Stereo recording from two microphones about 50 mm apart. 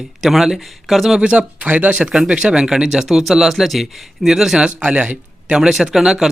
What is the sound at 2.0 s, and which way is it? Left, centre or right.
Speech, centre.